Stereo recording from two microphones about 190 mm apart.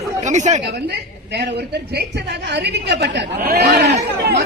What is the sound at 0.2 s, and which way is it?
Speech, 40° right (ahead or behind).